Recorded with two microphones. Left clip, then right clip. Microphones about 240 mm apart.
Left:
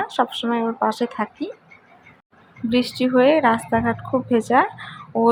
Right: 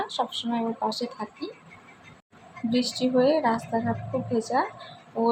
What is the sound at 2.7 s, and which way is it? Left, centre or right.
Speech, left.